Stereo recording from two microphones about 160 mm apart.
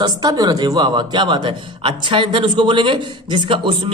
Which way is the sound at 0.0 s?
25° right (ahead or behind).